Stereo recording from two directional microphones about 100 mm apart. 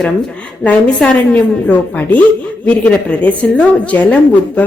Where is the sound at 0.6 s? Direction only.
15° left (ahead or behind).